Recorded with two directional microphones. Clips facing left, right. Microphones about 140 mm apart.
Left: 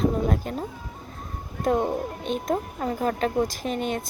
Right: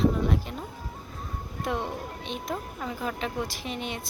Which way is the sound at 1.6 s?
45° left (ahead or behind).